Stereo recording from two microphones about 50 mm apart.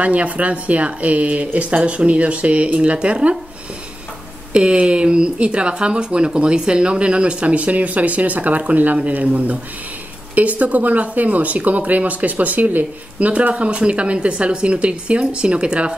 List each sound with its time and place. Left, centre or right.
0.0 s speech: right
4.5 s speech: right